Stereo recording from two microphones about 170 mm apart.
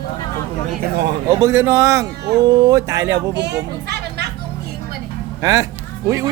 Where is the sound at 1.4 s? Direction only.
15° right (ahead or behind).